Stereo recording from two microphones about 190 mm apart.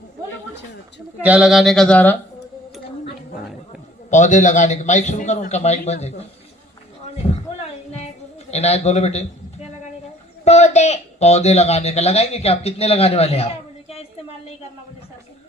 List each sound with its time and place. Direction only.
1.2 s speech: 5° right (ahead or behind)
4.1 s speech: 40° left (ahead or behind)
7.2 s a sound: 30° left (ahead or behind)
8.4 s speech: 35° left (ahead or behind)
10.4 s speech: 35° left (ahead or behind)